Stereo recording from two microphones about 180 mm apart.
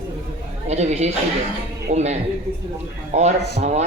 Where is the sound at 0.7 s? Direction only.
40° right (ahead or behind).